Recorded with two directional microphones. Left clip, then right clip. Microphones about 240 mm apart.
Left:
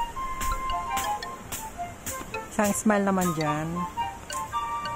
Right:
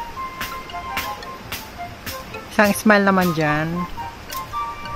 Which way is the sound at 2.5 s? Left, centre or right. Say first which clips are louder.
Right 10 dB; right.